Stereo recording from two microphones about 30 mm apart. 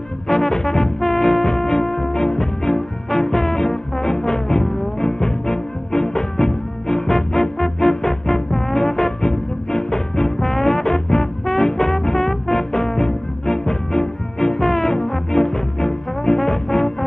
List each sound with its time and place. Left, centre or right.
0.3 s brass instrument: centre
1.0 s music: centre
8.9 s trombone: centre